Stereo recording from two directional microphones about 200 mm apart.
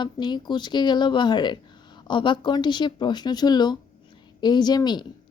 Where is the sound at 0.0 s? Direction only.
20° left (ahead or behind).